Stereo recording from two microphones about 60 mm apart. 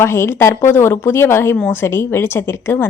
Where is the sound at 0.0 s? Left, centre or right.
Left.